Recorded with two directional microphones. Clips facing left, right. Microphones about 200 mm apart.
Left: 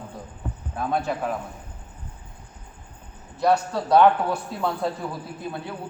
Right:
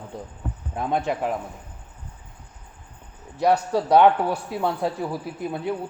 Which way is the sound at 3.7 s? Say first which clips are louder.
Right 1 dB; 10° right (ahead or behind).